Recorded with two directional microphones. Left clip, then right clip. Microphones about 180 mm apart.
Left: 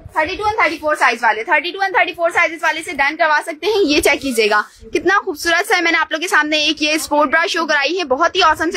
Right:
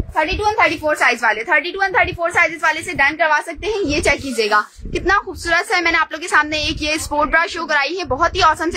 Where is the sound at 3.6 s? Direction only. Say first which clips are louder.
Left 4 dB; 20° left (ahead or behind).